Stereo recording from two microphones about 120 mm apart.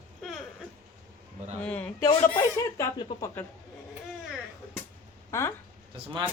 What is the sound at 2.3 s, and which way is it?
Speech, 25° left (ahead or behind).